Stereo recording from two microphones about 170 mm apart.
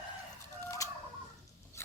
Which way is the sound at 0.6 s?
20° left (ahead or behind).